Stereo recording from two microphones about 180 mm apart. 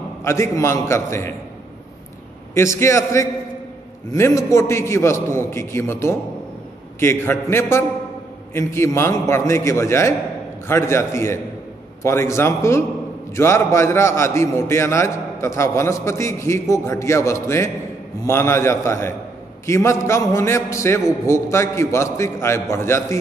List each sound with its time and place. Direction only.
0.2 s a man's voice: 15° left (ahead or behind)
2.5 s a man's voice: 15° left (ahead or behind)